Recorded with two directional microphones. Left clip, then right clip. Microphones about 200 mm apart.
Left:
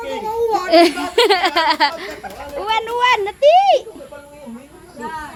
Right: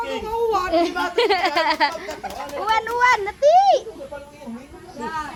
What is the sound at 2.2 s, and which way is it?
Chatter, 20° right (ahead or behind).